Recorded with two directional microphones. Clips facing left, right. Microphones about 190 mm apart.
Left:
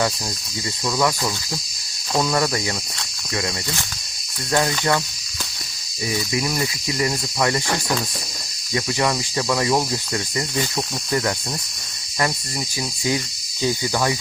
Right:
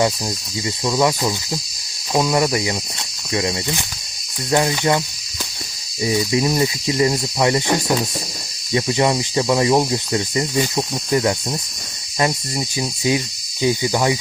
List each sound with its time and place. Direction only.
0.9 s cricket: 20° right (ahead or behind)
2.1 s speech: 15° right (ahead or behind)
3.3 s cricket: 20° right (ahead or behind)
4.5 s speech: 20° right (ahead or behind)
6.0 s cricket: 20° right (ahead or behind)
13.1 s cricket: 15° right (ahead or behind)